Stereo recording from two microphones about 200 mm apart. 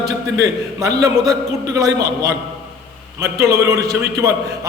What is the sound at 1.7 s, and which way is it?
A man's voice, 15° right (ahead or behind).